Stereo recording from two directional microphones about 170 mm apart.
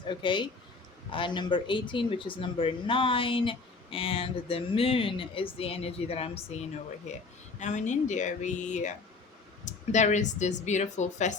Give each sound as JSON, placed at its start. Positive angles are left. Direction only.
{"t": 0.0, "sound": "speech", "side_deg": 30}